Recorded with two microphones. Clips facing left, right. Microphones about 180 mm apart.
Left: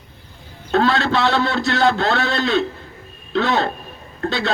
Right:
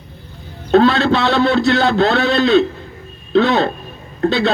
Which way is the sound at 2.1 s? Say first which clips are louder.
Right 6 dB; 65° right (ahead or behind).